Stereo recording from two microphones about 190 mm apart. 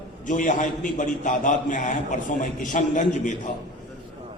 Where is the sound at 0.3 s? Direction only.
40° left (ahead or behind).